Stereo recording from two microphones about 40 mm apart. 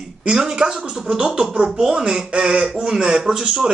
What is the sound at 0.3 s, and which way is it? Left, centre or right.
Speech, centre.